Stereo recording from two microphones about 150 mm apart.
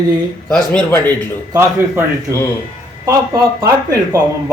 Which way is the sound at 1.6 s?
15° right (ahead or behind).